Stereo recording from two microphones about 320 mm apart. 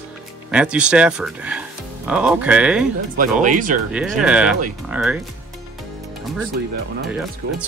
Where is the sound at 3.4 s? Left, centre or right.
Right.